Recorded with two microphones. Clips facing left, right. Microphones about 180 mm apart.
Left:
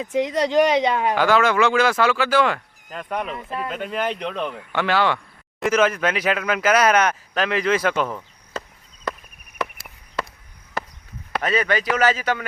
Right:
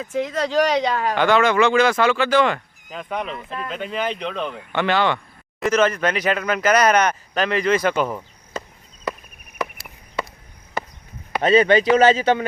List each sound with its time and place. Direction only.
0.0 s speech: 15° left (ahead or behind)
1.1 s speech: 5° left (ahead or behind)
9.6 s a sound: centre (ahead or behind)
11.4 s speech: 25° right (ahead or behind)